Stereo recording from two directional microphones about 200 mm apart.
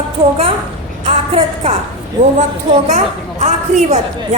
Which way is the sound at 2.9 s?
35° right (ahead or behind).